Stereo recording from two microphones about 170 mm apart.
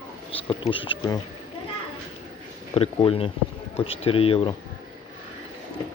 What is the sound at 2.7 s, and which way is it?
Speech, 35° left (ahead or behind).